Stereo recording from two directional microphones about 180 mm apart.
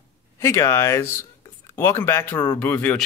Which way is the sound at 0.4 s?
20° left (ahead or behind).